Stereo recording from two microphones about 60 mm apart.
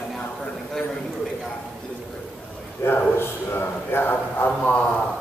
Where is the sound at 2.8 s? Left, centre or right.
Left.